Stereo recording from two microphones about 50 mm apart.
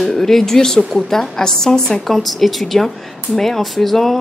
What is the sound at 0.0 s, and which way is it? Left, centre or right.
A woman's voice, centre.